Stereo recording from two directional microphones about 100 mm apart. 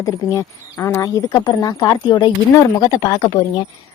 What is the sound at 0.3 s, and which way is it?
A woman's voice, 30° left (ahead or behind).